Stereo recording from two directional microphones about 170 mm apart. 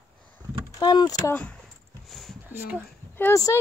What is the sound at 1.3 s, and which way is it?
Speech, 10° left (ahead or behind).